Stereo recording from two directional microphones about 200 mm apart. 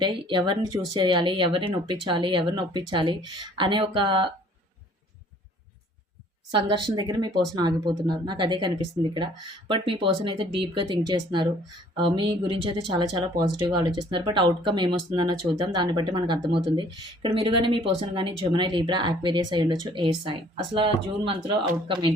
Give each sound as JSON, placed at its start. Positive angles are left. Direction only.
{"t": 0.0, "sound": "speech", "side_deg": -25}
{"t": 6.5, "sound": "speech", "side_deg": -25}